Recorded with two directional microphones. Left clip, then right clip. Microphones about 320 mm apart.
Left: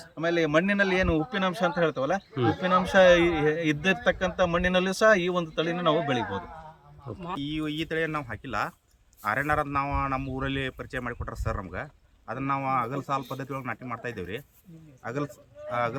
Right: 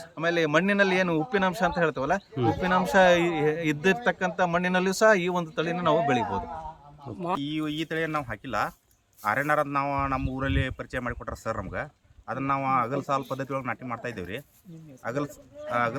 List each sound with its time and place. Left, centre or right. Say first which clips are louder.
0.0 s speech: right 1 dB; centre
7.4 s speech: right 1 dB; centre